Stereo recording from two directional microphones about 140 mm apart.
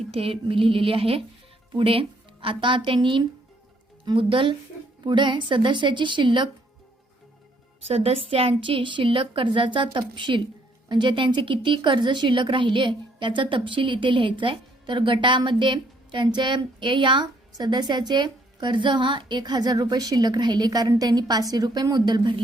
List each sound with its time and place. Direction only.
0.1 s a woman's voice: 40° right (ahead or behind)
7.8 s a woman's voice: 45° right (ahead or behind)